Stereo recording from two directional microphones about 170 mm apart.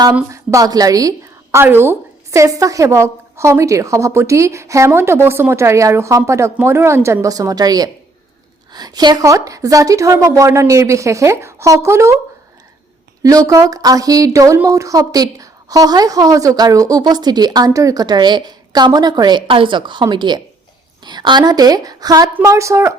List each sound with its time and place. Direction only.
0.3 s a woman's voice: 20° right (ahead or behind)
13.2 s a woman's voice: 20° right (ahead or behind)